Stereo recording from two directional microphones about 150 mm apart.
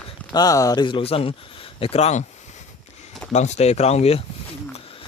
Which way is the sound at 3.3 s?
50° left (ahead or behind).